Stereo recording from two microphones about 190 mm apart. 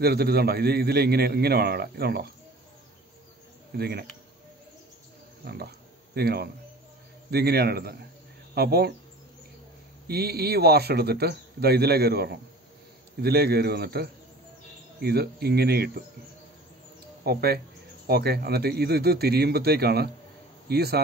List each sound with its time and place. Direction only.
0.0 s speech: 55° right (ahead or behind)
3.7 s speech: 55° right (ahead or behind)
5.4 s speech: 55° right (ahead or behind)
10.0 s speech: 55° right (ahead or behind)
17.2 s speech: 55° right (ahead or behind)